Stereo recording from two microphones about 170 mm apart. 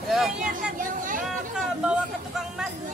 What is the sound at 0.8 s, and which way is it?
Chatter, 50° right (ahead or behind).